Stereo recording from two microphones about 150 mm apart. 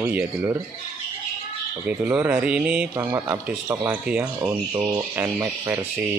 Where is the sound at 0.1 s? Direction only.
10° right (ahead or behind).